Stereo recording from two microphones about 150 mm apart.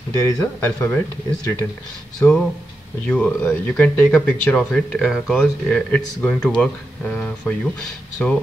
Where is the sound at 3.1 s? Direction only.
5° left (ahead or behind).